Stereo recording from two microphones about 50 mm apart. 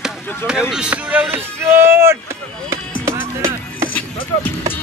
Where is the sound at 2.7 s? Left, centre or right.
Right.